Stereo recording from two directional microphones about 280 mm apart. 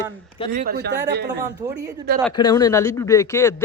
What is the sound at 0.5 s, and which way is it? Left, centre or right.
Speech, right.